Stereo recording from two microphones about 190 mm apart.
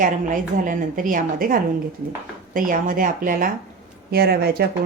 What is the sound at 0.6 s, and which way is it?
Speech, 45° right (ahead or behind).